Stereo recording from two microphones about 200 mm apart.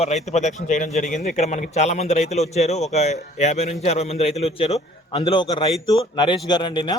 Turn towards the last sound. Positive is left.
turn(degrees=25)  # may be behind; listen again after turning